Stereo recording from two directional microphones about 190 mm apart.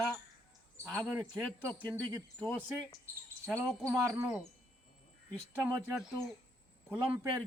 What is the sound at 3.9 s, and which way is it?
Speech, 15° right (ahead or behind).